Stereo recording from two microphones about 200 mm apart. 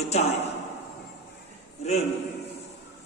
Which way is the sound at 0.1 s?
35° left (ahead or behind).